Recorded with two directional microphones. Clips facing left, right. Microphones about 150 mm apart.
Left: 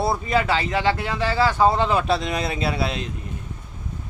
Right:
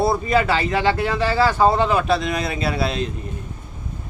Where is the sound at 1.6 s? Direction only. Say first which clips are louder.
Right 1 dB; 5° right (ahead or behind).